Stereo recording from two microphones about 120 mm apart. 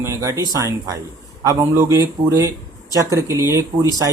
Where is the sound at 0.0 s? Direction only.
25° right (ahead or behind).